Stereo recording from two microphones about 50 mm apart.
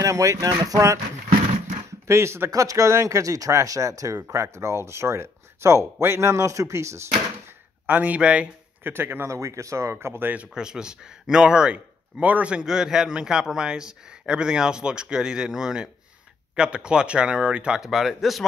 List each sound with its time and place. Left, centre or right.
0.0 s speech: right
2.0 s speech: right
4.3 s speech: right
7.8 s speech: right
8.2 s speech: right
8.8 s speech: right
9.3 s speech: right
10.5 s a man's voice: centre
12.2 s speech: right
12.6 s a man's voice: centre
17.7 s speech: centre